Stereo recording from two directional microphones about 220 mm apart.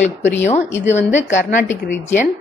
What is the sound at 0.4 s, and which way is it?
A woman's voice, 30° left (ahead or behind).